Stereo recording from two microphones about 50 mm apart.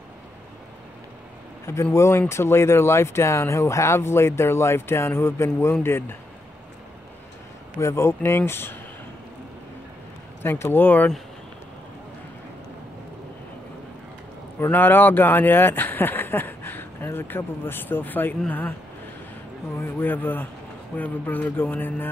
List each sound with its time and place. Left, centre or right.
2.0 s speech: left
7.8 s speech: left
10.4 s speech: left
14.7 s speech: left
19.8 s speech: left